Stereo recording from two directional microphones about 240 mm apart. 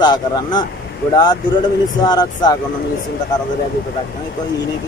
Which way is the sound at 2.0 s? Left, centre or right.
Centre.